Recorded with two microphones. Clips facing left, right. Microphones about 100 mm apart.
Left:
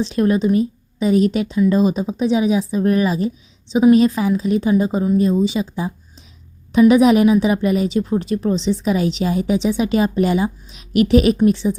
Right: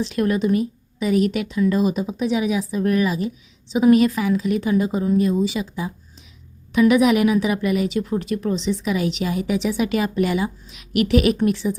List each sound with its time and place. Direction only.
0.0 s a woman's voice: 30° left (ahead or behind)